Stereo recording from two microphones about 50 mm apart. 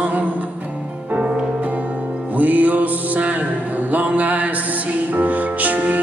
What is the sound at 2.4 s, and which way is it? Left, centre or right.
Music, right.